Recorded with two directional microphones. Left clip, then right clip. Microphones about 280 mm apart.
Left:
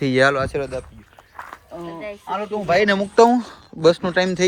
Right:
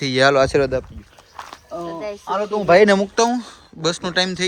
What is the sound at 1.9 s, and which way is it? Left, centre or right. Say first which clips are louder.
Speech: right 3 dB; centre.